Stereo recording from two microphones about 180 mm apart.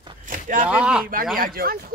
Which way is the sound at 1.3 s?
55° right (ahead or behind).